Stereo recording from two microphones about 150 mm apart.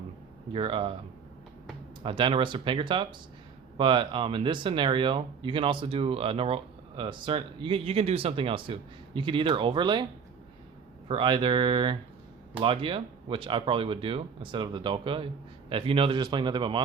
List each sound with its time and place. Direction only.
0.5 s speech: 35° right (ahead or behind)
2.0 s speech: 35° right (ahead or behind)
11.1 s speech: 30° right (ahead or behind)